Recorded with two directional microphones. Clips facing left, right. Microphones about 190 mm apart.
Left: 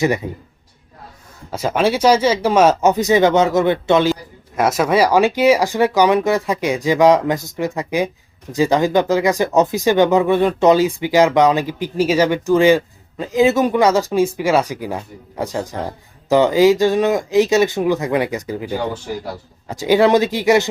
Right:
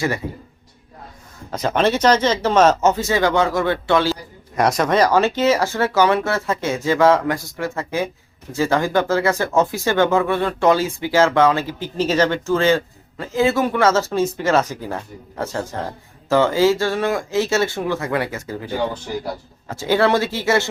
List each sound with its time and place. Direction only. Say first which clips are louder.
1.5 s speech: left 1 dB; 10° left (ahead or behind)
4.5 s speech: left 1 dB; 5° left (ahead or behind)